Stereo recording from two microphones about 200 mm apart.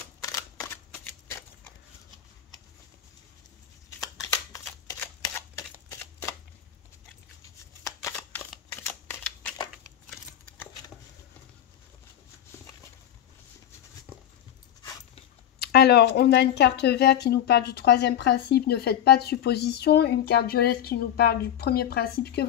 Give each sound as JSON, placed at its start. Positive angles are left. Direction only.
{"t": 0.2, "sound": "camera", "side_deg": 15}
{"t": 4.5, "sound": "camera", "side_deg": 15}
{"t": 8.0, "sound": "a sound", "side_deg": 5}
{"t": 15.6, "sound": "speech", "side_deg": 55}